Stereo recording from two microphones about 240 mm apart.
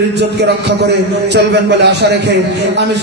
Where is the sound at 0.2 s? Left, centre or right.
Right.